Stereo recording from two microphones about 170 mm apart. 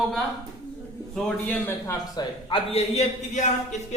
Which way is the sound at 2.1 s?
30° left (ahead or behind).